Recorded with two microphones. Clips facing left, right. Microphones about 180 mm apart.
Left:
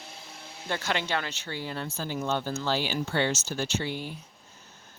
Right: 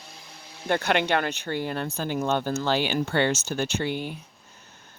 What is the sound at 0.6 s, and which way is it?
Speech, 60° right (ahead or behind).